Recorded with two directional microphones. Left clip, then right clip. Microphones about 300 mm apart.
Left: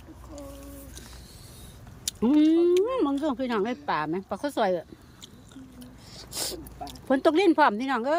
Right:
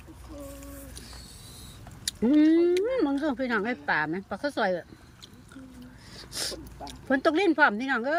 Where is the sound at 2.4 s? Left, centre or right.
Centre.